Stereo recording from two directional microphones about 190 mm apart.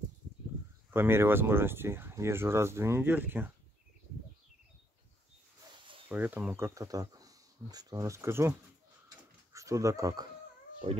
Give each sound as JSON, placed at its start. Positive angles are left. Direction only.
{"t": 0.9, "sound": "speech", "side_deg": -10}
{"t": 6.0, "sound": "speech", "side_deg": -10}
{"t": 10.8, "sound": "speech", "side_deg": -30}